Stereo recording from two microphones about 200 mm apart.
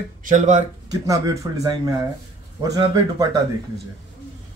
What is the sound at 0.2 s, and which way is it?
Speech, 40° right (ahead or behind).